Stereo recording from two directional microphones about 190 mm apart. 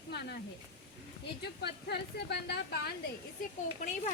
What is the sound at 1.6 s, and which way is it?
Speech, 60° left (ahead or behind).